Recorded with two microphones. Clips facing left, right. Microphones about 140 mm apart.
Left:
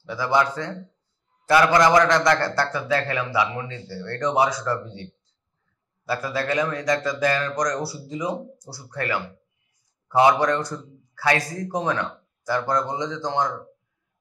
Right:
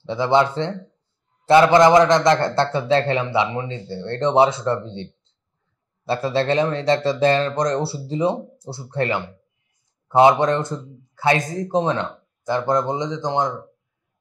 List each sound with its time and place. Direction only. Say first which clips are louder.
0.0 s a man's voice: right 4 dB; 25° right (ahead or behind)